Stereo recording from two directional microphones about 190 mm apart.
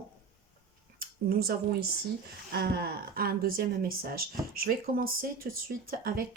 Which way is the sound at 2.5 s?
55° right (ahead or behind).